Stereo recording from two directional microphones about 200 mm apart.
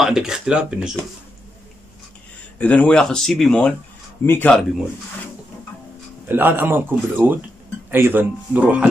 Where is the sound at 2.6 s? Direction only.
5° left (ahead or behind).